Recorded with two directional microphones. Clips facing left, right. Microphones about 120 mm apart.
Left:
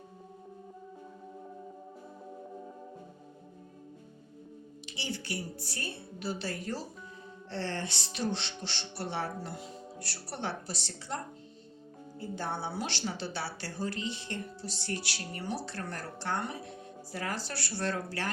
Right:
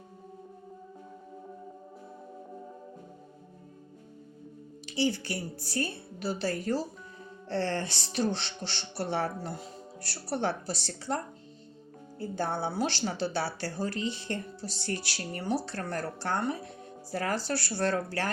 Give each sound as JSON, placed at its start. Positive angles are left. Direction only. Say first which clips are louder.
{"t": 4.9, "sound": "speech", "louder": "right 9 dB", "side_deg": -40}
{"t": 12.4, "sound": "speech", "louder": "right 6 dB", "side_deg": -40}